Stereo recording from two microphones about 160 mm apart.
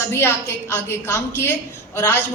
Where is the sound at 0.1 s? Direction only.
15° left (ahead or behind).